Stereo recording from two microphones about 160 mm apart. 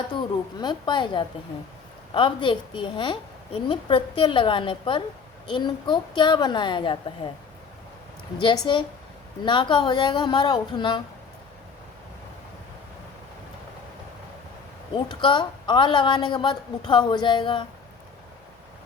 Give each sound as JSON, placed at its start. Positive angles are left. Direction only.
{"t": 0.1, "sound": "a woman's voice", "side_deg": 30}
{"t": 8.4, "sound": "a woman's voice", "side_deg": 30}
{"t": 14.9, "sound": "a woman's voice", "side_deg": 30}